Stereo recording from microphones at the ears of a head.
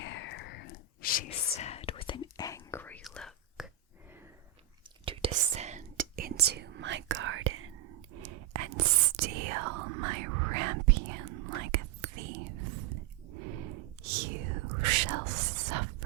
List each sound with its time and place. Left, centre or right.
0.0 s whispering: left
5.0 s whispering: right